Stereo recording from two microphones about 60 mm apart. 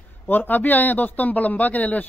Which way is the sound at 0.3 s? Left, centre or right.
Left.